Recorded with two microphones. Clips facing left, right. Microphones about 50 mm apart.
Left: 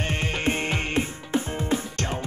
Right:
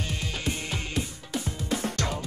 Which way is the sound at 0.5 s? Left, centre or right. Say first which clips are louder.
Left 7 dB; left.